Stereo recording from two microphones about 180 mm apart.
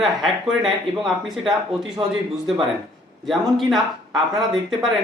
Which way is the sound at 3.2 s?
Centre (ahead or behind).